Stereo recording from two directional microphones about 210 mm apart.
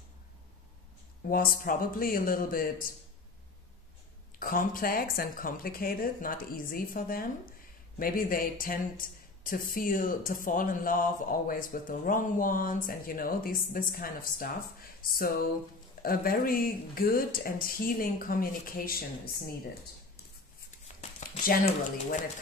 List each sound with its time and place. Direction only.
1.2 s speech: 45° left (ahead or behind)
4.4 s speech: 40° left (ahead or behind)